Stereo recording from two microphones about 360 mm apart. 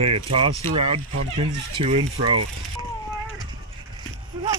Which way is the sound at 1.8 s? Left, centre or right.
Centre.